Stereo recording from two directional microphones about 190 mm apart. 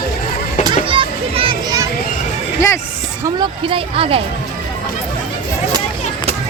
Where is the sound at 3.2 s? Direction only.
25° right (ahead or behind).